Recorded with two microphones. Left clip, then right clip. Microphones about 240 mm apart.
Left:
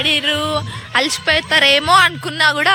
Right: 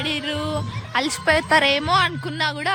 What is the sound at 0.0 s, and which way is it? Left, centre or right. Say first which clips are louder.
Speech: left 9 dB; centre.